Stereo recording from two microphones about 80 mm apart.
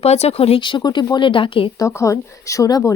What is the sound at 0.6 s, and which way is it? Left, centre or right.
Speech, left.